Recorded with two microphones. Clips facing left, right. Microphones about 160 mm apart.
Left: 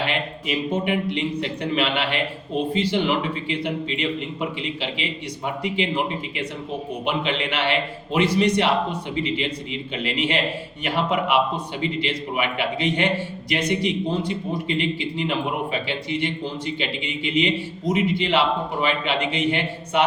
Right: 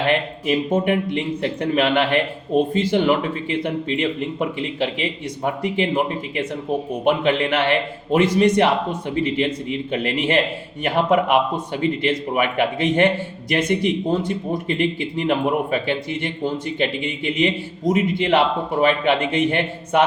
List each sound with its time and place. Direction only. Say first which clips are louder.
0.1 s speech: right 6 dB; 50° right (ahead or behind)
7.0 s speech: right 7 dB; 50° right (ahead or behind)